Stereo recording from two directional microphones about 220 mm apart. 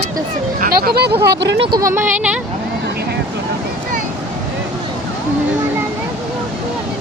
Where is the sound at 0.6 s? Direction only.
45° right (ahead or behind).